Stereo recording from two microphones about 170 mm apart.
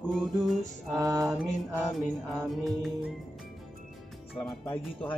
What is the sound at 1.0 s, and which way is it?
Mantra, 20° right (ahead or behind).